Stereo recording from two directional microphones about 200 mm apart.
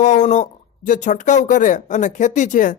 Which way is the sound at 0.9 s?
40° left (ahead or behind).